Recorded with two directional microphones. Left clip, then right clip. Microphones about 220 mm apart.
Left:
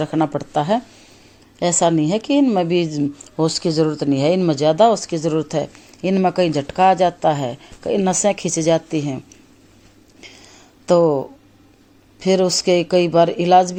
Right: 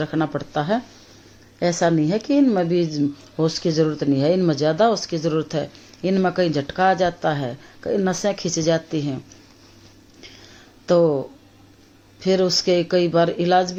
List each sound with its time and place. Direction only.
0.0 s speech: 20° left (ahead or behind)
10.8 s speech: 25° left (ahead or behind)